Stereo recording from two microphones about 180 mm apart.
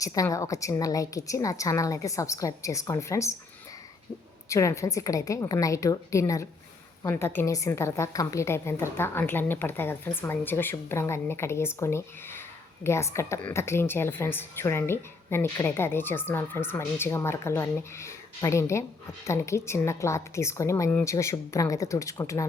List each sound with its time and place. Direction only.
0.0 s a woman's voice: 20° left (ahead or behind)
4.4 s a woman's voice: 15° left (ahead or behind)